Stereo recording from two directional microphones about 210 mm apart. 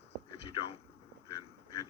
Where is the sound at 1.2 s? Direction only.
15° left (ahead or behind).